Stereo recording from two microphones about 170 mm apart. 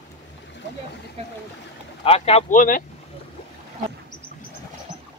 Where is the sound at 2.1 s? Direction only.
35° left (ahead or behind).